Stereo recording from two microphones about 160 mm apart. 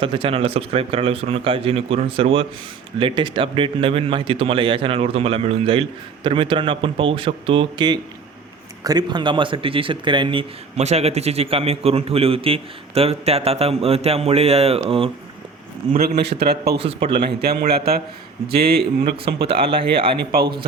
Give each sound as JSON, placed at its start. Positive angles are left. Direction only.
{"t": 0.0, "sound": "speech", "side_deg": -35}
{"t": 15.9, "sound": "a man's voice", "side_deg": -80}
{"t": 16.4, "sound": "a man's voice", "side_deg": -90}
{"t": 16.7, "sound": "speech", "side_deg": -35}
{"t": 17.4, "sound": "a man's voice", "side_deg": -80}
{"t": 19.5, "sound": "speech", "side_deg": -35}
{"t": 20.1, "sound": "a man's voice", "side_deg": -75}